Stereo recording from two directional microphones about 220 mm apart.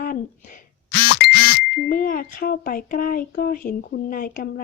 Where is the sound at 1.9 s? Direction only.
40° left (ahead or behind).